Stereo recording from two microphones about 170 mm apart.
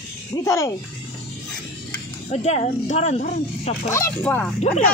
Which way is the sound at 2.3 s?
40° left (ahead or behind).